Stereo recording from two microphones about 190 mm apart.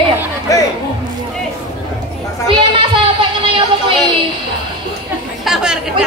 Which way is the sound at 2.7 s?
25° right (ahead or behind).